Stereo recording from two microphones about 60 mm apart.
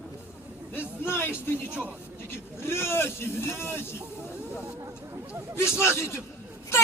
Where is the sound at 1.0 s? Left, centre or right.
Left.